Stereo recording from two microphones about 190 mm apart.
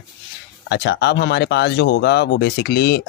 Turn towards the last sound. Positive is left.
turn(degrees=55)  # may be behind; listen again after turning